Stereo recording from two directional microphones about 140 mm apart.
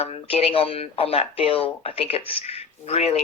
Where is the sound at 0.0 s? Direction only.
45° left (ahead or behind).